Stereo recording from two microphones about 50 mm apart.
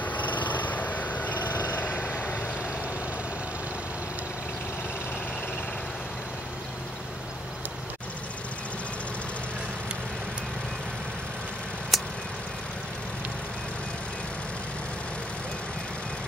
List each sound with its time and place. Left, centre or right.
0.0 s vehicle: left
11.9 s vehicle: centre